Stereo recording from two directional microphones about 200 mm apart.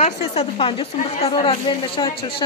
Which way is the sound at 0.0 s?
30° left (ahead or behind).